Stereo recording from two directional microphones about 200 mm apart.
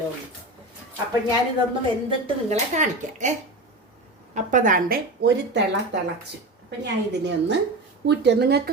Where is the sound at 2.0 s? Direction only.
30° right (ahead or behind).